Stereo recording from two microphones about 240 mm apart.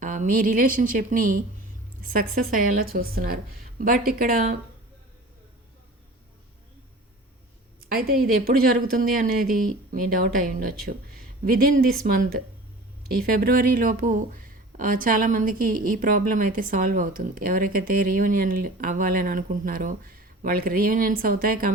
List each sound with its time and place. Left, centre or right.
0.0 s speech: right
7.8 s speech: right
13.2 s speech: right